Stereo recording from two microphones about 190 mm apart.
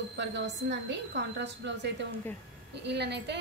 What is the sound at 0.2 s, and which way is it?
A woman's voice, 70° right (ahead or behind).